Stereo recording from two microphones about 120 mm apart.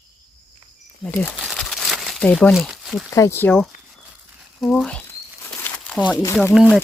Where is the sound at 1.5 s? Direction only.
Centre (ahead or behind).